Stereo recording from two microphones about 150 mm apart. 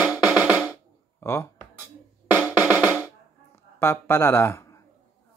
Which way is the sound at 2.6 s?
10° right (ahead or behind).